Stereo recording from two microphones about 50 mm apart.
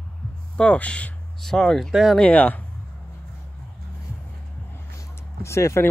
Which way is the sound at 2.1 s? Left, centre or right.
Left.